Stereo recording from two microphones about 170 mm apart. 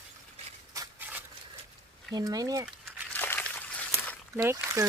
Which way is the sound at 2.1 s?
20° right (ahead or behind).